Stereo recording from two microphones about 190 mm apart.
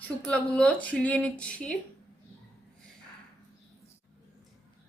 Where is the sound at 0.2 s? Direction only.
5° left (ahead or behind).